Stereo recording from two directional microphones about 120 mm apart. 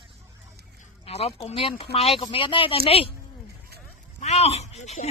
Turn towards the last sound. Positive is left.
turn(degrees=70)  # may be behind; listen again after turning